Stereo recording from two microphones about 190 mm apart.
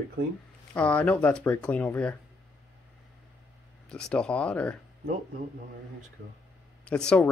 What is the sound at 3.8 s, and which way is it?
Speech, 5° left (ahead or behind).